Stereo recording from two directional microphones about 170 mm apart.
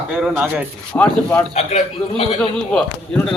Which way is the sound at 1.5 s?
35° left (ahead or behind).